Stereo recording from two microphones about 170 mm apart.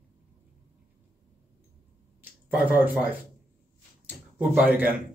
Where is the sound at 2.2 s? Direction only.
10° right (ahead or behind).